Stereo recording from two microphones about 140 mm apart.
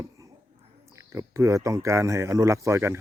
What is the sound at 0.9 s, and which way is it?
Speech, 20° right (ahead or behind).